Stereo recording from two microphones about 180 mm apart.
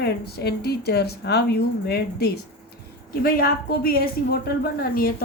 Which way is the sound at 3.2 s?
55° left (ahead or behind).